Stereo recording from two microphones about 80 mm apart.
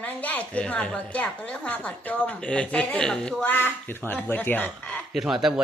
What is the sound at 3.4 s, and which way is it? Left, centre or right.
Speech, left.